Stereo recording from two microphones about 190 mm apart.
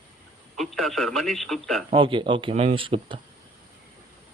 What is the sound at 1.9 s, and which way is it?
Speech, 25° right (ahead or behind).